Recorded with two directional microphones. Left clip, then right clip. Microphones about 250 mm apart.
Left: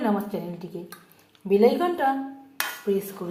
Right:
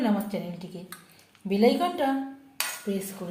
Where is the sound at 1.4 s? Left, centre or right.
Left.